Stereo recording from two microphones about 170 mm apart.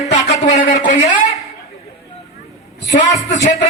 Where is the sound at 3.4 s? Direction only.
40° left (ahead or behind).